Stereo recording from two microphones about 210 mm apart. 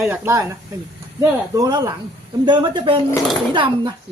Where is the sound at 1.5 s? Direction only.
20° right (ahead or behind).